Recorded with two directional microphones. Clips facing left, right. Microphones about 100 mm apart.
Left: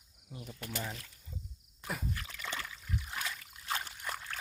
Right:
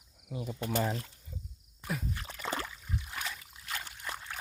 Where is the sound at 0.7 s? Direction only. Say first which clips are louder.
Right 9 dB; 45° right (ahead or behind).